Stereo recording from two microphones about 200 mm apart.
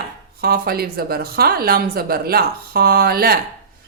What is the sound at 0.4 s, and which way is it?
A woman's voice, 50° right (ahead or behind).